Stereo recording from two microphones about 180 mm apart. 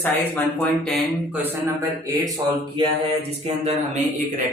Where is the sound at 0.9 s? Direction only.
10° right (ahead or behind).